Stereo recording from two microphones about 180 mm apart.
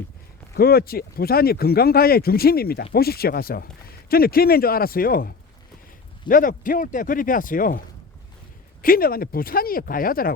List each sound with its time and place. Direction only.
0.5 s speech: 60° left (ahead or behind)
8.8 s speech: 55° left (ahead or behind)